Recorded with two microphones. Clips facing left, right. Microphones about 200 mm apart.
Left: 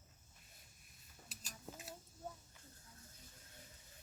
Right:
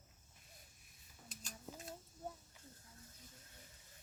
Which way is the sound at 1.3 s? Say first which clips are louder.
Right 1 dB; 5° left (ahead or behind).